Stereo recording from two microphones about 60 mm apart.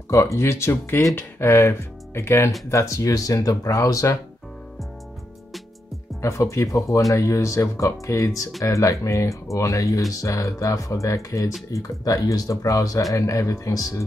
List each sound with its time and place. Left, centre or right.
0.1 s speech: left
6.2 s speech: left
11.7 s speech: left